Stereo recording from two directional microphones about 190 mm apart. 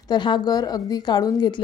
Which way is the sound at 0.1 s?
25° left (ahead or behind).